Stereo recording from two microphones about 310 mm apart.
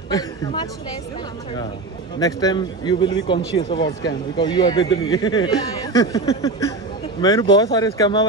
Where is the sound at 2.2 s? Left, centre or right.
Centre.